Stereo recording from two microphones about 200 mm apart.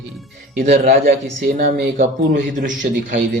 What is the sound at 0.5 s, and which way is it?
A man's voice, 45° right (ahead or behind).